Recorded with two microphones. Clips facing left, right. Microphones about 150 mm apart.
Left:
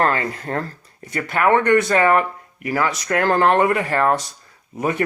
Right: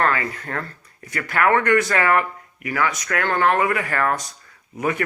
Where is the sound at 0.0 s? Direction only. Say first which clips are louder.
Left 2 dB; 30° left (ahead or behind).